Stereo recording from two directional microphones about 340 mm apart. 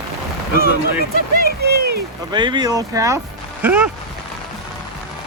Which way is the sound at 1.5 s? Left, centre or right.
Right.